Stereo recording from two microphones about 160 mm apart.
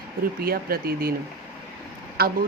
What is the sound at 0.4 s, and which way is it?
Speech, 70° right (ahead or behind).